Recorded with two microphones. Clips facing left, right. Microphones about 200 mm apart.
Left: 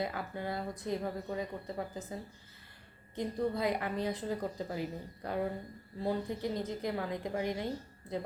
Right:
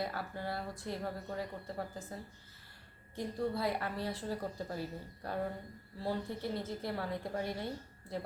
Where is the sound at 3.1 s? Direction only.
20° left (ahead or behind).